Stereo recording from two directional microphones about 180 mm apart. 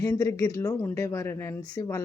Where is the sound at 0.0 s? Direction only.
15° left (ahead or behind).